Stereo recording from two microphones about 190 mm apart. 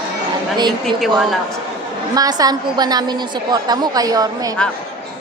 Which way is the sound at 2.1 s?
20° right (ahead or behind).